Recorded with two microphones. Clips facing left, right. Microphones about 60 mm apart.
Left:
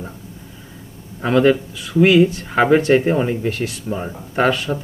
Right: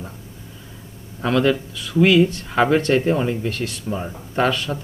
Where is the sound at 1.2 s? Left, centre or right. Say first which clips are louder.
Left 4 dB; left.